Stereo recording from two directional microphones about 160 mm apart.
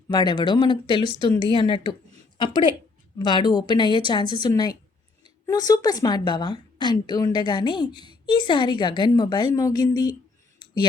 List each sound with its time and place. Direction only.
0.1 s a woman's voice: 25° left (ahead or behind)
3.2 s a woman's voice: 30° left (ahead or behind)